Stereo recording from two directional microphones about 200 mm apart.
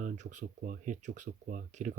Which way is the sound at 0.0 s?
35° right (ahead or behind).